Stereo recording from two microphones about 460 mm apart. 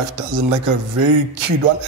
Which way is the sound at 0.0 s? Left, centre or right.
Right.